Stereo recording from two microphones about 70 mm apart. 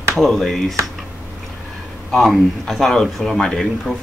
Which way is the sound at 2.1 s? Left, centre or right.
Centre.